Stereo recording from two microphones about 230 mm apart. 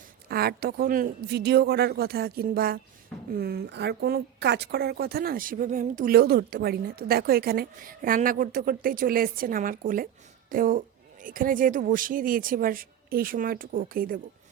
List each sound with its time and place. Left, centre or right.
0.3 s a woman's voice: right